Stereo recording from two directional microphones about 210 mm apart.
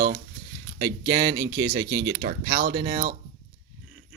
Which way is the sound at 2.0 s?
50° right (ahead or behind).